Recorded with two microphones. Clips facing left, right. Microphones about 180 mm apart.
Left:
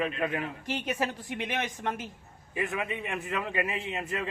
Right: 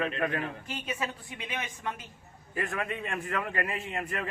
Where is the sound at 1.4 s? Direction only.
75° left (ahead or behind).